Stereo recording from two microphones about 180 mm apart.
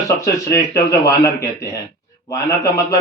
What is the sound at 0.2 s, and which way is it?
Speech, 20° left (ahead or behind).